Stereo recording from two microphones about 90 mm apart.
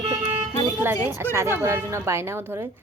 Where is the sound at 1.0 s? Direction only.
25° right (ahead or behind).